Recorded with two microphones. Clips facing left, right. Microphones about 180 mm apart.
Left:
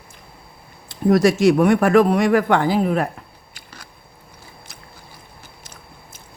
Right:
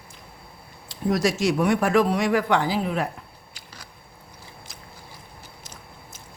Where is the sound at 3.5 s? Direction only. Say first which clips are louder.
Left 3 dB; 55° left (ahead or behind).